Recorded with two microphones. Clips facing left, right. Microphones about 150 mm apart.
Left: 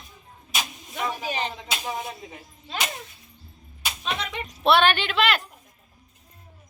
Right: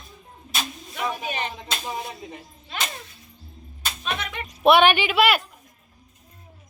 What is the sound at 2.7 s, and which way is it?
Speech, 15° left (ahead or behind).